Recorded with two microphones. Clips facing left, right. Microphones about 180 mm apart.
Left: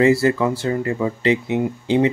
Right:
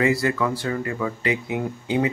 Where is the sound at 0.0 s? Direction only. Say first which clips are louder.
Left 6 dB; 30° left (ahead or behind).